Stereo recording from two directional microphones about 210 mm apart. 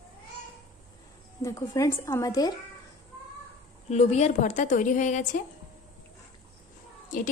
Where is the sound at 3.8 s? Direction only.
30° left (ahead or behind).